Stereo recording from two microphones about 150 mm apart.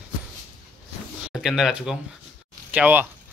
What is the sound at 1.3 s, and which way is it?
Speech, centre (ahead or behind).